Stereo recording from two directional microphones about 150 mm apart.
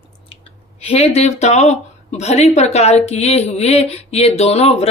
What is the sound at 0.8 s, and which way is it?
Speech, 45° left (ahead or behind).